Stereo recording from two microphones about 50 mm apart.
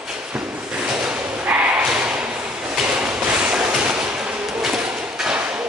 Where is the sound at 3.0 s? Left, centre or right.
Centre.